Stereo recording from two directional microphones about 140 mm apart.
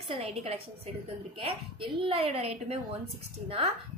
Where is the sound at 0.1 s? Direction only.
50° right (ahead or behind).